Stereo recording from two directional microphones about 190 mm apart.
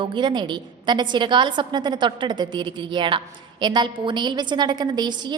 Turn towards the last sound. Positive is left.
turn(degrees=-20)  # may be behind; listen again after turning